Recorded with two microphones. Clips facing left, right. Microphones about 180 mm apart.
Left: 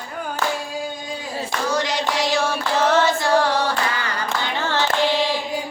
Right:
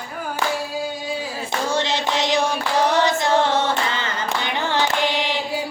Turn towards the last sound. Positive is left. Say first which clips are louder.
# left 2 dB
turn(degrees=-15)  # may be behind; listen again after turning